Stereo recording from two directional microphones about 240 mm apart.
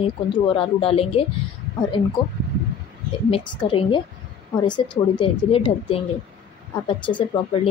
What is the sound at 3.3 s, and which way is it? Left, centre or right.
Speech, left.